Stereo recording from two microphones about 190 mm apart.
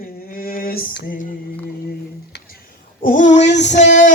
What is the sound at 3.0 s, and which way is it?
Child singing, 45° left (ahead or behind).